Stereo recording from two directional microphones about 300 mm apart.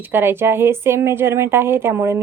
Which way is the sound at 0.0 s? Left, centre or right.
Centre.